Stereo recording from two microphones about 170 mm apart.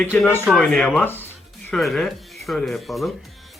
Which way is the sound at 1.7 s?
Centre (ahead or behind).